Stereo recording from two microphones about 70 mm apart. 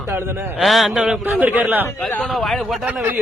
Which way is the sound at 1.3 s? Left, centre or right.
Right.